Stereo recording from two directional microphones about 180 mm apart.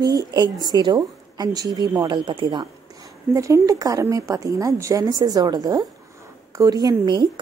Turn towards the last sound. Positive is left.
turn(degrees=-20)  # may be behind; listen again after turning